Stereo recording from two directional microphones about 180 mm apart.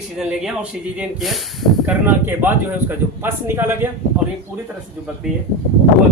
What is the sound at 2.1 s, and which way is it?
Speech, 10° right (ahead or behind).